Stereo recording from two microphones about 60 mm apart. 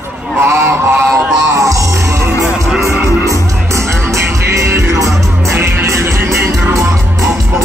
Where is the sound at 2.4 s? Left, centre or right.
Centre.